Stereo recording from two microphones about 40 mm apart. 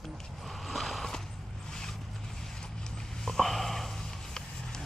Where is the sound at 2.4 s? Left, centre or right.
Centre.